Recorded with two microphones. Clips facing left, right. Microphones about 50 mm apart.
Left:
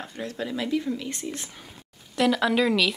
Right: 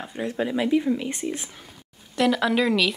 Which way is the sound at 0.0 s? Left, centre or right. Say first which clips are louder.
Right 5 dB; centre.